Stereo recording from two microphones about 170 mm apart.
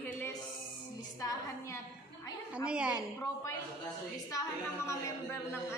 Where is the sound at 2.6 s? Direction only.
5° right (ahead or behind).